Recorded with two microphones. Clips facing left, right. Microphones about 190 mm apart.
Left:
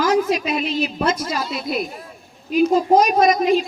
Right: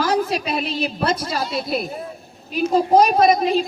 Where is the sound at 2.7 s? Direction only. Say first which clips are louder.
Right 3 dB; 30° right (ahead or behind).